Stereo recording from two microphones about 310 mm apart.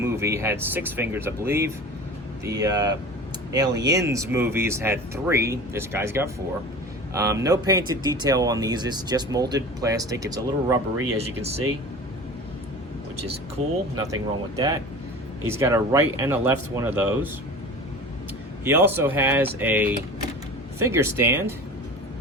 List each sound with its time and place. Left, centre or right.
0.0 s speech: centre
10.9 s speech: right
11.2 s speech: centre
13.9 s speech: centre
18.6 s speech: centre